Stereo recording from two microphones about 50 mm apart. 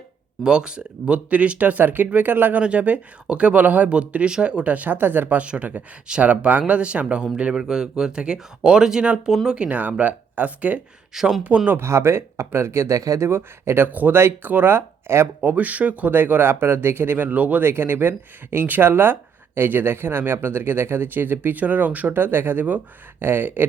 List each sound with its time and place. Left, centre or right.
0.4 s speech: centre; by 2.6 s right
2.6 s speech: right
5.4 s speech: right; by 9.6 s centre
9.6 s speech: right
11.1 s speech: centre
11.4 s speech: right
11.7 s speech: right
13.3 s speech: right
14.1 s speech: right
15.4 s speech: right
17.6 s speech: right